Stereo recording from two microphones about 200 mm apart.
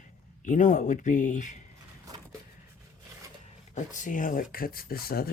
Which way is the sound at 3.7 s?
40° left (ahead or behind).